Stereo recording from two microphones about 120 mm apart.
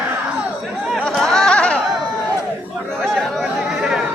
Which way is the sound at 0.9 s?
Centre (ahead or behind).